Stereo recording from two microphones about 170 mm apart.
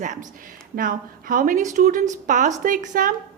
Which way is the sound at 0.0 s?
50° right (ahead or behind).